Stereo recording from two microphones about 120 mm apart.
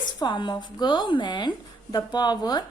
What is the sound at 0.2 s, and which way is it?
A woman's voice, 40° left (ahead or behind).